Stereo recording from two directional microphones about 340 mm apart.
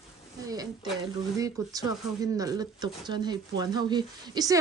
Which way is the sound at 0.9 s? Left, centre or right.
Centre.